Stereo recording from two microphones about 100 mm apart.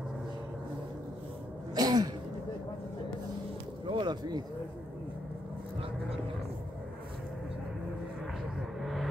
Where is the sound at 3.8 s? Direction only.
50° right (ahead or behind).